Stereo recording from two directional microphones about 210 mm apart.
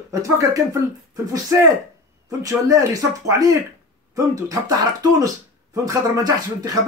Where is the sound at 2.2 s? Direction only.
15° right (ahead or behind).